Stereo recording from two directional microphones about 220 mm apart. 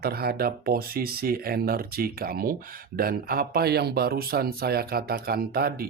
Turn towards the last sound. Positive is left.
turn(degrees=-45)  # may be behind; listen again after turning